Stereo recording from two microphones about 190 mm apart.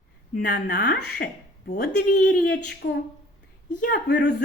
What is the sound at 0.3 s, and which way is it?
Speech, 45° left (ahead or behind).